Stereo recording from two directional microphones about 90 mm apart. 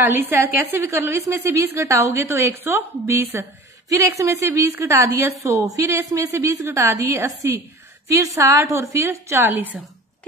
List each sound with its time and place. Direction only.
0.0 s a woman's voice: 25° right (ahead or behind)